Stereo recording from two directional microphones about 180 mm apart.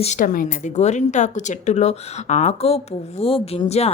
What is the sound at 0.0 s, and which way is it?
A woman's voice, 45° left (ahead or behind).